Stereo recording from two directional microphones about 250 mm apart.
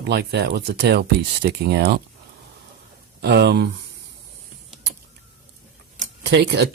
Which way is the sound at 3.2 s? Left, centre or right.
Right.